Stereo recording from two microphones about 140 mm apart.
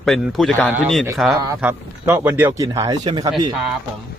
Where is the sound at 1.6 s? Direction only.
15° right (ahead or behind); by 3.3 s 30° right (ahead or behind).